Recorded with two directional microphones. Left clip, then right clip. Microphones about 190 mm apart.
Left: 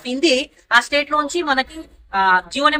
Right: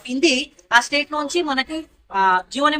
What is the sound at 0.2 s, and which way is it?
A woman's voice, centre (ahead or behind).